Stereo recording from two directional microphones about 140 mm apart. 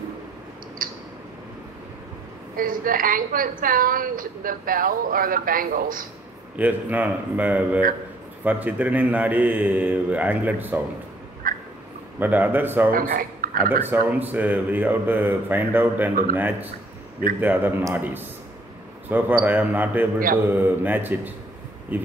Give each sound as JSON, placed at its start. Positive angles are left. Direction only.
{"t": 0.8, "sound": "a sound", "side_deg": -80}
{"t": 2.5, "sound": "a woman's voice", "side_deg": -85}
{"t": 6.5, "sound": "speech", "side_deg": -10}
{"t": 11.4, "sound": "a sound", "side_deg": -85}
{"t": 12.2, "sound": "speech", "side_deg": -15}
{"t": 12.9, "sound": "speech", "side_deg": -90}
{"t": 13.8, "sound": "speech", "side_deg": -15}